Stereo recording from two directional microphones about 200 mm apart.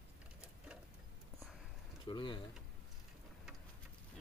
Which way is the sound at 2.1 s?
25° left (ahead or behind).